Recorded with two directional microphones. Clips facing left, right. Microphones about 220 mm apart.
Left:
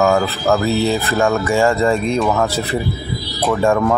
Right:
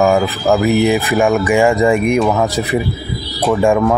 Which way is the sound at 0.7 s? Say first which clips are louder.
Right 4 dB; 15° right (ahead or behind).